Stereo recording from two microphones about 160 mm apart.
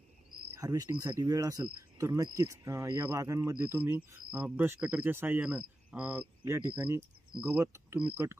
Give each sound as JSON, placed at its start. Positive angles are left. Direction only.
{"t": 0.6, "sound": "speech", "side_deg": -20}